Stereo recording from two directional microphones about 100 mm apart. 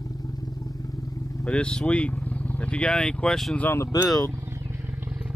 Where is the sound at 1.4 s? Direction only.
10° left (ahead or behind).